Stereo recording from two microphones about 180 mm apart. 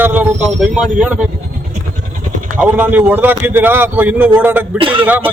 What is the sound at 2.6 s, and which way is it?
Speech, 10° right (ahead or behind).